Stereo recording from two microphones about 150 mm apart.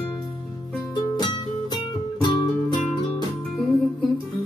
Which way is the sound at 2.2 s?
30° left (ahead or behind).